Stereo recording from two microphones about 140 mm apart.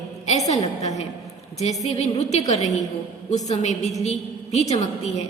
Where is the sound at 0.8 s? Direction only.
50° left (ahead or behind).